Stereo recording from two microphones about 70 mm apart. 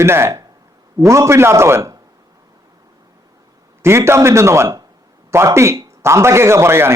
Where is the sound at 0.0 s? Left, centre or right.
Right.